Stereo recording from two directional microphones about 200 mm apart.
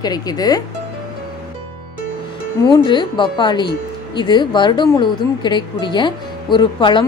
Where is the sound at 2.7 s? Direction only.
25° left (ahead or behind).